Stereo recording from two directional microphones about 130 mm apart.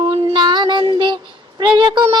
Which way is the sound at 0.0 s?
35° right (ahead or behind).